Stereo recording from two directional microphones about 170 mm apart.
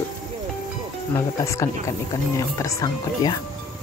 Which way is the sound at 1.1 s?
20° left (ahead or behind).